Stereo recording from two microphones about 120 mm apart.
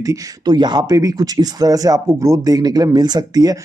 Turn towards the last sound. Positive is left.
turn(degrees=-35)  # may be behind; listen again after turning